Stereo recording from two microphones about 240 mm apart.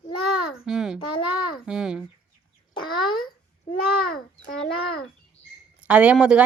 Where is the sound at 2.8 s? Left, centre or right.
Centre.